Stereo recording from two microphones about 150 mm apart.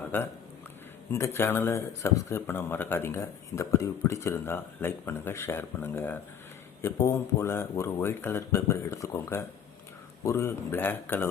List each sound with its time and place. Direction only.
1.1 s speech: 15° left (ahead or behind)